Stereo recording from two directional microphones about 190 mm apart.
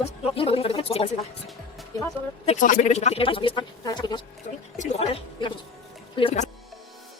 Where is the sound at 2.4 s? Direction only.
40° left (ahead or behind).